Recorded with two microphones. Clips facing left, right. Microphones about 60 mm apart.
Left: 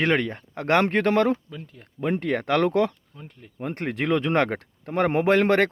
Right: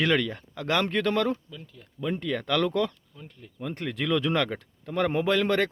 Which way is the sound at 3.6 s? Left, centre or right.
Left.